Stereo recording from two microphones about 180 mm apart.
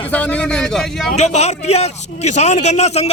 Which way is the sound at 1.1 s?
35° left (ahead or behind).